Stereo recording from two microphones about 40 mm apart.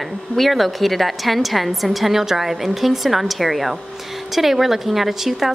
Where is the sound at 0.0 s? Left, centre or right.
Centre.